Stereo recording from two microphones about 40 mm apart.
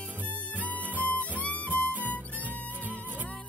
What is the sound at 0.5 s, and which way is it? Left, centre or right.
Music, left.